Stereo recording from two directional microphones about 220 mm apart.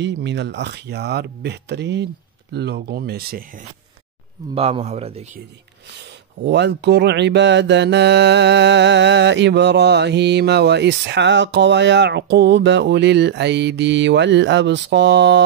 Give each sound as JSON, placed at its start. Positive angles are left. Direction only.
{"t": 0.0, "sound": "speech", "side_deg": -55}
{"t": 4.6, "sound": "speech", "side_deg": -30}
{"t": 5.9, "sound": "speech", "side_deg": -50}